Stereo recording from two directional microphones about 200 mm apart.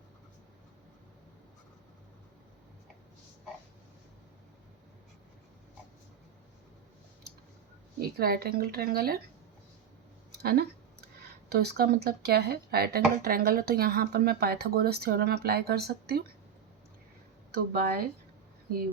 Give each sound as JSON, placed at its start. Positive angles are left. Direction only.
{"t": 7.9, "sound": "speech", "side_deg": -50}
{"t": 10.4, "sound": "speech", "side_deg": -50}
{"t": 17.5, "sound": "speech", "side_deg": -50}